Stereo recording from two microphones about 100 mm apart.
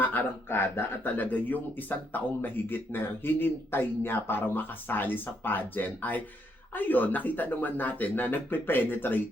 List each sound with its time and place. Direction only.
0.0 s speech: 20° left (ahead or behind)